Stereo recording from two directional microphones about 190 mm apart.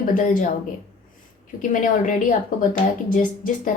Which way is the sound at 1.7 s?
45° left (ahead or behind).